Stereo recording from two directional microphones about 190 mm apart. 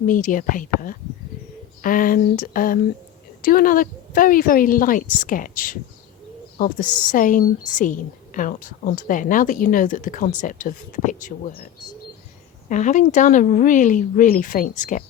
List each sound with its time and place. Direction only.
0.1 s a woman's voice: 45° left (ahead or behind)
12.6 s a woman's voice: 40° left (ahead or behind)